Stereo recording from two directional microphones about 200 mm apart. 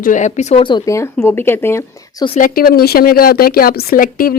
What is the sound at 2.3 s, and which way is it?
Speech, 45° left (ahead or behind).